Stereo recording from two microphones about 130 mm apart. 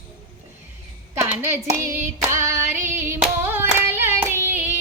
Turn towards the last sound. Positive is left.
turn(degrees=-15)  # may be behind; listen again after turning